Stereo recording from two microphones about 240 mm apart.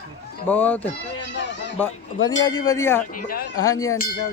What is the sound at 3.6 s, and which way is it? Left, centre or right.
Speech, centre.